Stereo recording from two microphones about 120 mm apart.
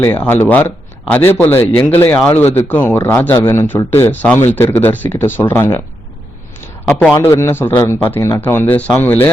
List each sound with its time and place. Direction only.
0.0 s a man's voice: 15° left (ahead or behind)
7.1 s a man's voice: 25° left (ahead or behind)